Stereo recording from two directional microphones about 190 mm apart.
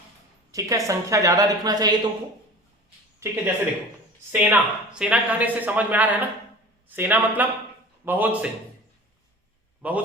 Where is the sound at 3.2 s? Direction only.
15° right (ahead or behind).